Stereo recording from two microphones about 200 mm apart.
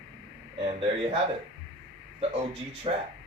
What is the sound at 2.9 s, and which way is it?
Speech, 30° right (ahead or behind).